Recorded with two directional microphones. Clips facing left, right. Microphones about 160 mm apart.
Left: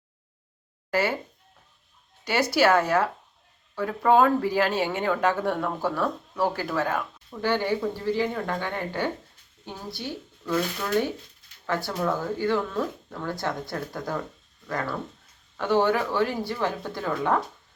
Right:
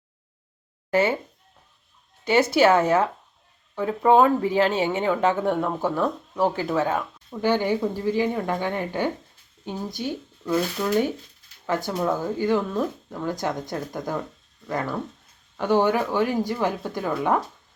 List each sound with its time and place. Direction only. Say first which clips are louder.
2.2 s a woman's voice: right 4 dB; 25° right (ahead or behind)